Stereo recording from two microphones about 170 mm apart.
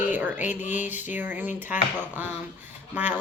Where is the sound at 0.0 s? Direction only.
10° right (ahead or behind).